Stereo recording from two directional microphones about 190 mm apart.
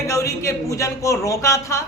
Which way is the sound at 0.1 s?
15° left (ahead or behind).